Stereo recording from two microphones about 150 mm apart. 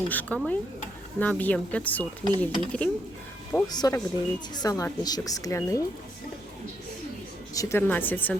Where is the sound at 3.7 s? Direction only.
25° left (ahead or behind).